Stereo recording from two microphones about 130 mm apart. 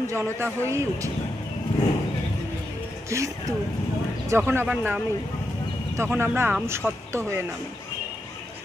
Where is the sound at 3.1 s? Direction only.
25° right (ahead or behind).